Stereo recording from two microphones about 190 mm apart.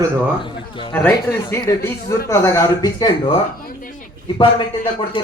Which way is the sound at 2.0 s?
15° left (ahead or behind).